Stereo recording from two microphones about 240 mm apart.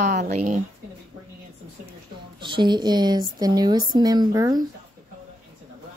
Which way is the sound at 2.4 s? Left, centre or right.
Centre.